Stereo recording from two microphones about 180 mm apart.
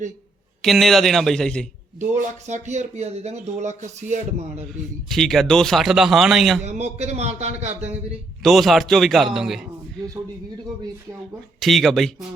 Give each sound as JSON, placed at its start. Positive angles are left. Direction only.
{"t": 0.6, "sound": "a man's voice", "side_deg": 0}
{"t": 2.5, "sound": "speech", "side_deg": -40}
{"t": 5.0, "sound": "a man's voice", "side_deg": 0}
{"t": 6.6, "sound": "speech", "side_deg": -40}
{"t": 8.4, "sound": "a man's voice", "side_deg": 0}
{"t": 11.6, "sound": "a man's voice", "side_deg": 0}